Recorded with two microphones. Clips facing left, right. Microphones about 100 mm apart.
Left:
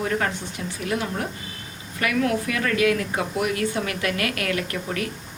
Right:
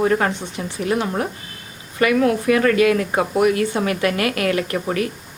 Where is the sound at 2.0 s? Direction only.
30° right (ahead or behind).